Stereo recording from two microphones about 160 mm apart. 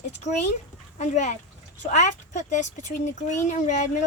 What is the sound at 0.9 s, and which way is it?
Speech, 50° left (ahead or behind).